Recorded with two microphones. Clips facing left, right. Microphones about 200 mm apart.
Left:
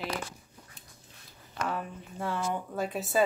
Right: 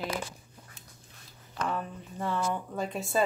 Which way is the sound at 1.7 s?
10° left (ahead or behind).